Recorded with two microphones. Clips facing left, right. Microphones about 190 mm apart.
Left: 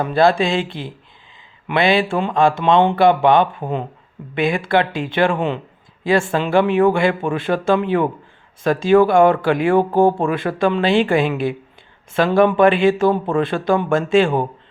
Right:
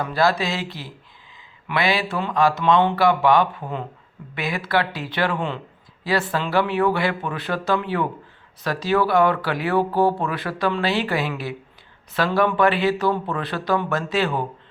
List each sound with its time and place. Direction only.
0.0 s speech: 25° left (ahead or behind)
9.7 s speech: 50° left (ahead or behind)
10.2 s speech: 25° left (ahead or behind)